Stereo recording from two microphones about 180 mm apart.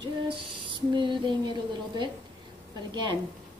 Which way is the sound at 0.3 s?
25° right (ahead or behind).